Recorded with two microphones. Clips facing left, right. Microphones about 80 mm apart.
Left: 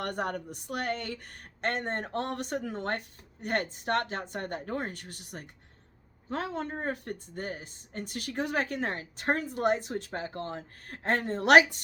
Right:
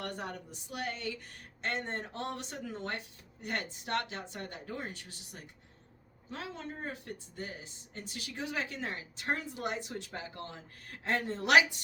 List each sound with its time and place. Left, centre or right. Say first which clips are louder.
0.0 s speech: left 7 dB; left